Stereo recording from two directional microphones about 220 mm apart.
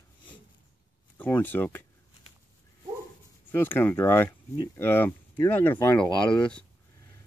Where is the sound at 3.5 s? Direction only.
10° left (ahead or behind).